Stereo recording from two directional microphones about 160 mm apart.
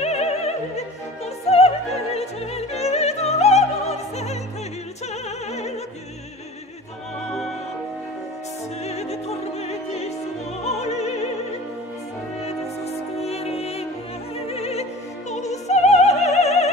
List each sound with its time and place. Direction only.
0.0 s opera: 40° left (ahead or behind)
2.1 s music: 40° left (ahead or behind)
5.1 s opera: 45° left (ahead or behind)
7.2 s music: 5° left (ahead or behind)
8.8 s music: 40° left (ahead or behind)
12.8 s music: 40° left (ahead or behind)